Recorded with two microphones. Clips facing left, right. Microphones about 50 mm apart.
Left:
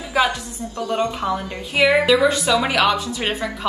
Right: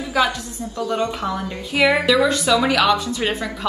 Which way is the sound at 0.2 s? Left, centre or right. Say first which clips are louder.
Even; left.